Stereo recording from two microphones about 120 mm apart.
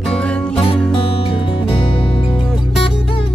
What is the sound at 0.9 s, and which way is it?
Music, 45° left (ahead or behind).